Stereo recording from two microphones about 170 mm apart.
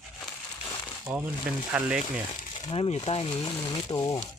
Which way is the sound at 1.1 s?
10° right (ahead or behind).